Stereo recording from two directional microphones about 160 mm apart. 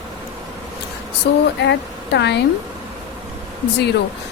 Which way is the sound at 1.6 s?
90° left.